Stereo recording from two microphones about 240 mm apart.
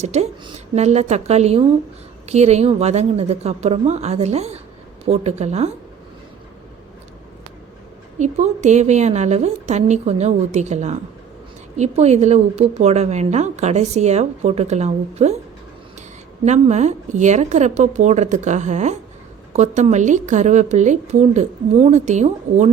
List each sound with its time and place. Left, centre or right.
0.0 s a woman's voice: right
8.2 s a woman's voice: right
16.5 s a woman's voice: right